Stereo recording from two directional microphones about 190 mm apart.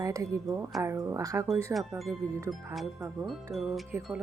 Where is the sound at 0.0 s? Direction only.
15° right (ahead or behind).